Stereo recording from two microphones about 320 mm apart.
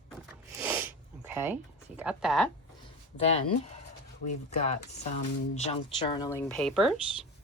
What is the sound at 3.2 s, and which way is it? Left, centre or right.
Speech, centre.